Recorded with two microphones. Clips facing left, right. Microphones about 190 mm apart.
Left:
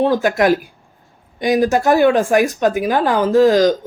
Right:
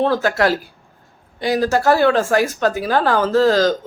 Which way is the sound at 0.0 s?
15° left (ahead or behind).